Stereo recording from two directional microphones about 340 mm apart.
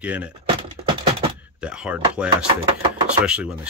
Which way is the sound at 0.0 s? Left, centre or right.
Centre.